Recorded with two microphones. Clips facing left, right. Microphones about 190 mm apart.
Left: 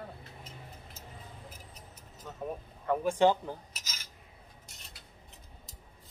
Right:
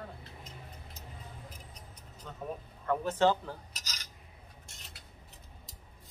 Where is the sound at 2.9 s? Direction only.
15° left (ahead or behind).